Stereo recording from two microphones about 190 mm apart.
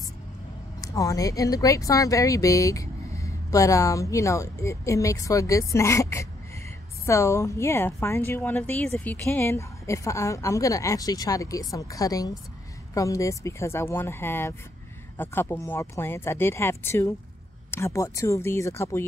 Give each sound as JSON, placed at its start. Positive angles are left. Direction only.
{"t": 0.7, "sound": "speech", "side_deg": 20}